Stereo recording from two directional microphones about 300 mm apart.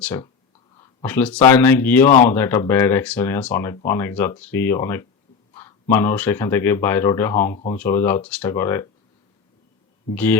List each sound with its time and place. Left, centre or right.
0.0 s speech: centre
2.0 s speech: left
2.3 s speech: centre
7.5 s speech: left
7.8 s speech: centre